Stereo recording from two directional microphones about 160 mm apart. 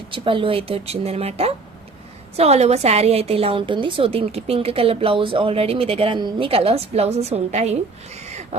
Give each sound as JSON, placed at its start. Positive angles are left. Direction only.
{"t": 0.1, "sound": "a woman's voice", "side_deg": -35}